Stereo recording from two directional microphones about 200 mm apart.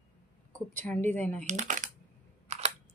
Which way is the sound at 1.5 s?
40° right (ahead or behind).